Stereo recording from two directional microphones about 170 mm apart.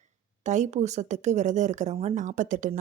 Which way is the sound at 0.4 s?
45° right (ahead or behind).